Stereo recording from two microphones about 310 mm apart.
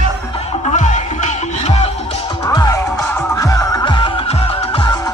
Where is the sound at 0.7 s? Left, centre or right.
Left.